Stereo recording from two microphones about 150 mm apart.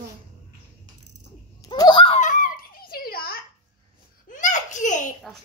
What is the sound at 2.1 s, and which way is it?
Giggle, 55° left (ahead or behind).